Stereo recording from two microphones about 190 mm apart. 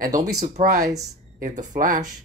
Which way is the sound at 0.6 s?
55° right (ahead or behind).